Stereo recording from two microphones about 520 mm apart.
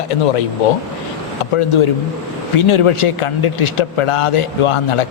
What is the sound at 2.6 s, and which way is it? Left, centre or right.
A man's voice, left.